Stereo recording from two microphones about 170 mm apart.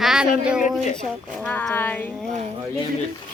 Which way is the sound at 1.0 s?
10° left (ahead or behind).